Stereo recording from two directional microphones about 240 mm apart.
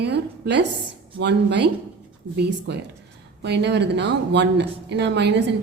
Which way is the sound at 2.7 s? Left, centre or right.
Right.